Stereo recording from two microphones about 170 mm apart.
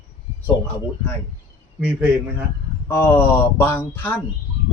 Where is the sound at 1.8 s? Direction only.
10° right (ahead or behind).